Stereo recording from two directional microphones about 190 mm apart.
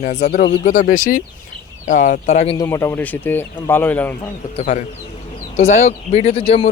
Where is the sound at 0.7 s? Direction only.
45° left (ahead or behind).